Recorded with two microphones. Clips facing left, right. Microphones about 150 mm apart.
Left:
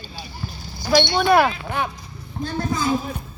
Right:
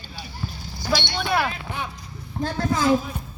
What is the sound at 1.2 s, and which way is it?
Speech, 55° left (ahead or behind).